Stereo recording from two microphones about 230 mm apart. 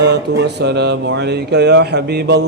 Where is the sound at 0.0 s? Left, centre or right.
Right.